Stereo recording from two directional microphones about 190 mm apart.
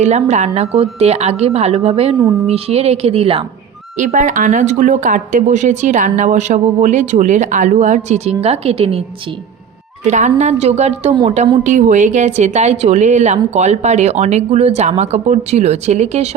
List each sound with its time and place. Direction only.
0.0 s speech: 35° right (ahead or behind)
3.9 s speech: 40° right (ahead or behind)
10.1 s speech: 40° right (ahead or behind)
11.1 s a woman's voice: 25° right (ahead or behind)
11.3 s speech: 40° right (ahead or behind)